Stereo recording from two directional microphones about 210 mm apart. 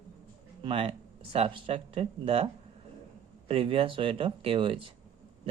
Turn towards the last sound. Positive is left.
turn(degrees=-25)  # may be behind; listen again after turning